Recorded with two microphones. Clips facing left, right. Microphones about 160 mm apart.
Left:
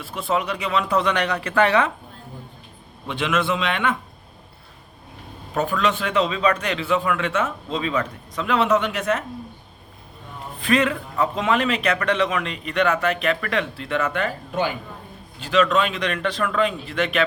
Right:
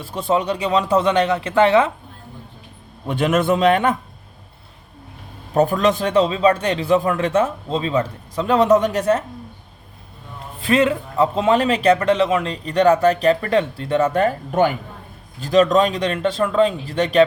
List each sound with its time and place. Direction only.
0.0 s speech: 30° right (ahead or behind)
3.1 s a man's voice: 45° right (ahead or behind)
5.5 s speech: 40° right (ahead or behind)
10.6 s speech: 30° right (ahead or behind)